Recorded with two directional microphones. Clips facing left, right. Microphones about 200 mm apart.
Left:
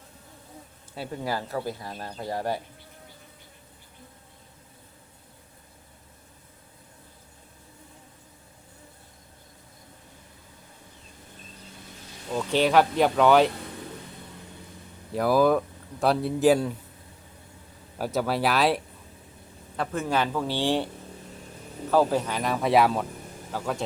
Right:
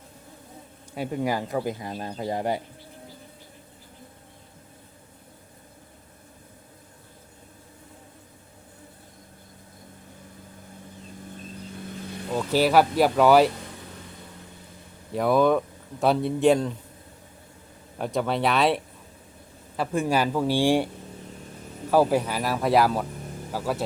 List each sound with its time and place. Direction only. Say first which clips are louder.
0.9 s speech: right 4 dB; 15° right (ahead or behind)
12.3 s speech: right 1 dB; 5° right (ahead or behind)
15.1 s speech: right 1 dB; centre (ahead or behind)
17.9 s speech: right 1 dB; 5° left (ahead or behind)